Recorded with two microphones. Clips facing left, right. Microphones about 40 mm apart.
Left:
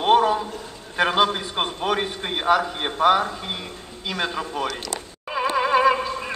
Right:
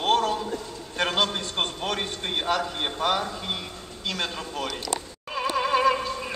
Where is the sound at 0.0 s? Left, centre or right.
Centre.